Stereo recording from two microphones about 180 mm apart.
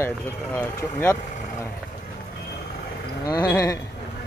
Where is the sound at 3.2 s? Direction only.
20° left (ahead or behind).